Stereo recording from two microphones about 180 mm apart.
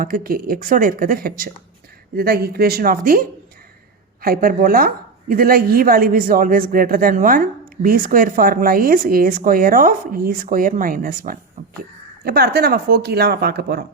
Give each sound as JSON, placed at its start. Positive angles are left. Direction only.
{"t": 0.0, "sound": "a man's voice", "side_deg": -55}